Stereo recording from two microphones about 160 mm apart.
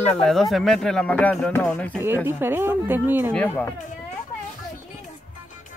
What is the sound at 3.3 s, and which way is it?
Speech, 5° left (ahead or behind).